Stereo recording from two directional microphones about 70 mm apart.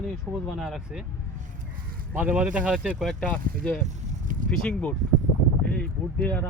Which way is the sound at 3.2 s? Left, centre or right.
Centre.